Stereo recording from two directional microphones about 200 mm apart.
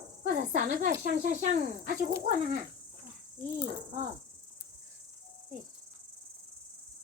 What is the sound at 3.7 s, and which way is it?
Speech, 35° right (ahead or behind).